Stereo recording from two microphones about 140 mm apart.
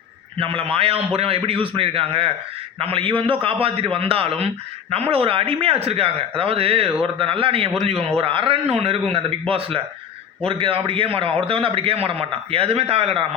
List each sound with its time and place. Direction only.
0.3 s a man's voice: 40° right (ahead or behind)